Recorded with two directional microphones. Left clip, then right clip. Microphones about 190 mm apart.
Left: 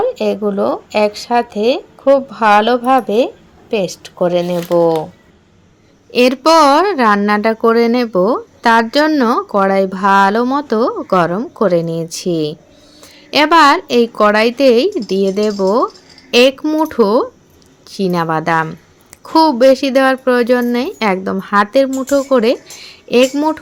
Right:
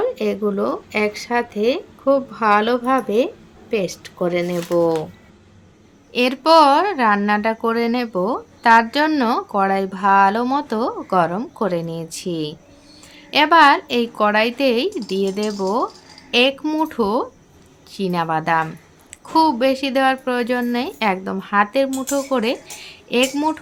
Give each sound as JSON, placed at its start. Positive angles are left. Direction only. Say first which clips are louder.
{"t": 0.1, "sound": "a woman's voice", "louder": "left 5 dB", "side_deg": 20}
{"t": 6.1, "sound": "a woman's voice", "louder": "left 5 dB", "side_deg": 30}